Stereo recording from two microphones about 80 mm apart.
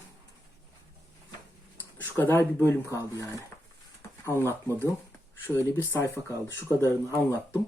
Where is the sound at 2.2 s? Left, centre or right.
Left.